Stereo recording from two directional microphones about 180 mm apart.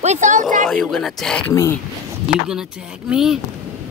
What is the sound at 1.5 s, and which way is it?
Speech, 15° left (ahead or behind).